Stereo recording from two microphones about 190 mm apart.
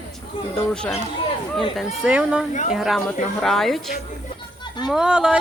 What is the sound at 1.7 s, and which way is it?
Speech, 5° right (ahead or behind).